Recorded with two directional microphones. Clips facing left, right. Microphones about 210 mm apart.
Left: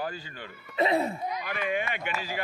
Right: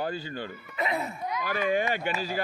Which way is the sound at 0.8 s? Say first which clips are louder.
Left 5 dB; 30° left (ahead or behind).